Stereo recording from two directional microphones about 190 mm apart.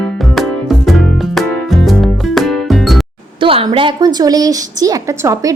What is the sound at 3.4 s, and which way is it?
A woman's voice, 30° right (ahead or behind).